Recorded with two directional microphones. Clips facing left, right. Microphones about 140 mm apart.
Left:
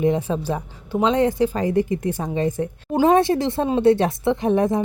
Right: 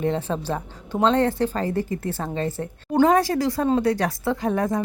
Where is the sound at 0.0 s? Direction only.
15° left (ahead or behind).